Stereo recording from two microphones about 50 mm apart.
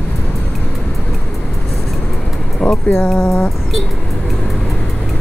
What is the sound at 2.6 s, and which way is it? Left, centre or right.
Speech, left.